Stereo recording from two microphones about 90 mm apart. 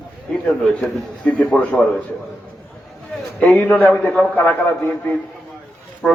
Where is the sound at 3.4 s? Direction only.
15° left (ahead or behind).